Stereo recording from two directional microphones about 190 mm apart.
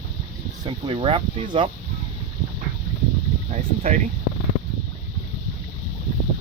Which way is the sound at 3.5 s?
35° right (ahead or behind).